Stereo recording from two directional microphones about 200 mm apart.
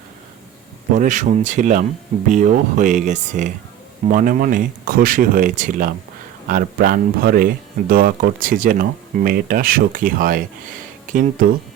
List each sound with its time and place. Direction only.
0.9 s speech: 40° right (ahead or behind)